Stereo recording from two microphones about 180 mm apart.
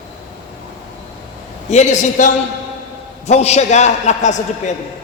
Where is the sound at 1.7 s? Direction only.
40° left (ahead or behind).